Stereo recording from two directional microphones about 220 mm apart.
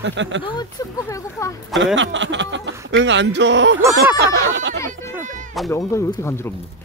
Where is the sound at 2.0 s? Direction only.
55° right (ahead or behind).